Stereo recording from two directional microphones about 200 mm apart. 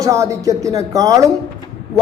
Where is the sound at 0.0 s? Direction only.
15° right (ahead or behind).